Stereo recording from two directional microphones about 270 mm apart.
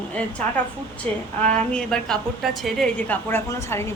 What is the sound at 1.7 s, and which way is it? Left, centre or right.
A woman's voice, centre.